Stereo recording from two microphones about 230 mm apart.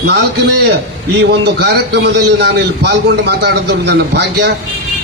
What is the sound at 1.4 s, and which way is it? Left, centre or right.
A man's voice, right.